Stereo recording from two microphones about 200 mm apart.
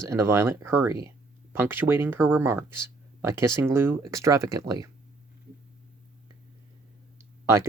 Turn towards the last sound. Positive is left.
turn(degrees=-15)  # may be behind; listen again after turning